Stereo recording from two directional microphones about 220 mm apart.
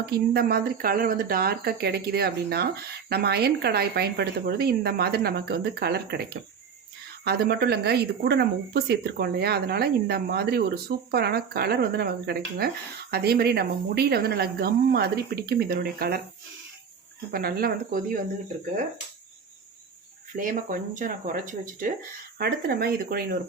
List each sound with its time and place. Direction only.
0.0 s speech: 45° right (ahead or behind)
7.3 s speech: 45° right (ahead or behind)
17.3 s speech: 45° right (ahead or behind)
20.3 s speech: 35° right (ahead or behind)